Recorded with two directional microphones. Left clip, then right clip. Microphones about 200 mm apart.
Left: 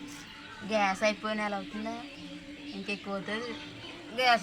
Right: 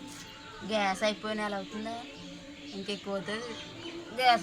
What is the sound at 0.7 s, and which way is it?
Speech, 5° right (ahead or behind).